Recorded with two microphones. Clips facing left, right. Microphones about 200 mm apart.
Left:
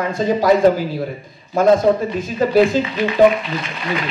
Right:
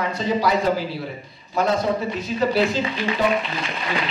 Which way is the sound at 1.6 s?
50° left (ahead or behind).